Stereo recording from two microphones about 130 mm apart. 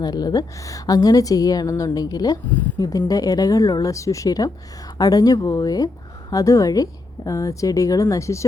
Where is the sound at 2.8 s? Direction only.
30° left (ahead or behind).